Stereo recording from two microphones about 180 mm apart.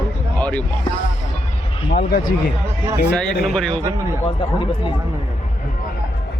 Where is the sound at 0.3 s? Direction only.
5° left (ahead or behind).